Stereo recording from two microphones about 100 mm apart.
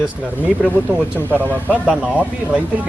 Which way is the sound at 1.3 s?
20° right (ahead or behind).